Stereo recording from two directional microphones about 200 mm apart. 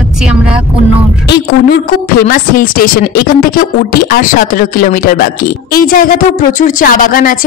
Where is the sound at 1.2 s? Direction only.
55° left (ahead or behind).